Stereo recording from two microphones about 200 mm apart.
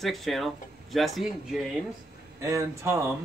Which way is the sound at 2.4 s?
15° right (ahead or behind).